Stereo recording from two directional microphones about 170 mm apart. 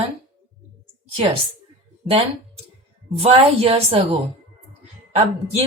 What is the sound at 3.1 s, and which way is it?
A woman's voice, 35° right (ahead or behind).